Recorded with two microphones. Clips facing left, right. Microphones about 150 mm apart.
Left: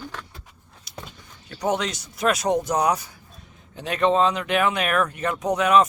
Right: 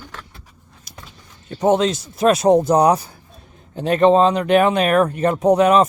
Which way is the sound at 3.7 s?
45° right (ahead or behind).